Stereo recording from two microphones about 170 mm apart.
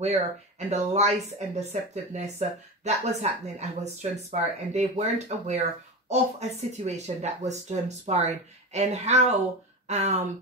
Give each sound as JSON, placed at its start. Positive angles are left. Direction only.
{"t": 0.0, "sound": "speech", "side_deg": -40}